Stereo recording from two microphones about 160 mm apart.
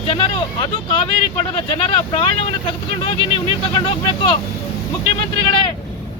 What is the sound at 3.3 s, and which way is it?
Speech, 30° left (ahead or behind).